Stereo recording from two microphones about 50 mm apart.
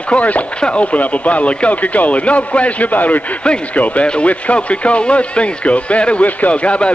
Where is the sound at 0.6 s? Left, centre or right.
Centre.